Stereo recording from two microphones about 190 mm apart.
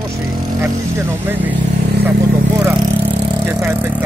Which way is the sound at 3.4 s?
10° right (ahead or behind).